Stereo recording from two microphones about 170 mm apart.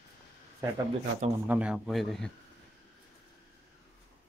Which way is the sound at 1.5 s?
5° right (ahead or behind).